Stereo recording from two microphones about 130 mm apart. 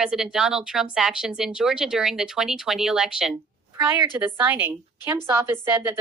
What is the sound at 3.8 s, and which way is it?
Speech, 15° right (ahead or behind).